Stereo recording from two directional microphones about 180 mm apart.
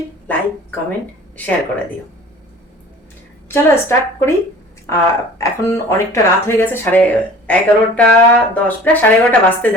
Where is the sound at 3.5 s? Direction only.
15° left (ahead or behind).